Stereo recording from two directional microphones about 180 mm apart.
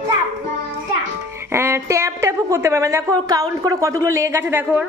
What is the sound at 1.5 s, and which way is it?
A woman's voice, 15° right (ahead or behind).